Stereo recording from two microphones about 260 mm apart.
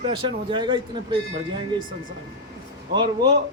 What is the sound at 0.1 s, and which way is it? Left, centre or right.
Speech, centre.